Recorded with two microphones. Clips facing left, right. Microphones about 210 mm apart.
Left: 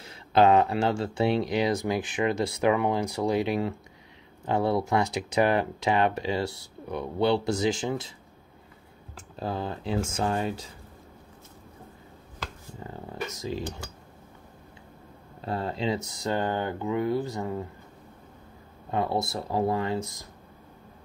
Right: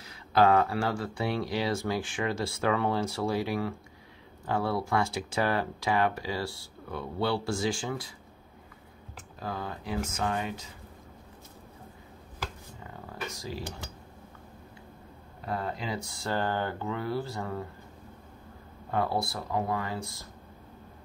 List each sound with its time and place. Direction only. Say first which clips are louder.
0.0 s speech: left 3 dB; 25° left (ahead or behind)
9.1 s speech: left 5 dB; 30° left (ahead or behind)
12.8 s speech: left 4 dB; 30° left (ahead or behind)
15.4 s speech: left 5 dB; 30° left (ahead or behind)
18.9 s speech: left 2 dB; 20° left (ahead or behind)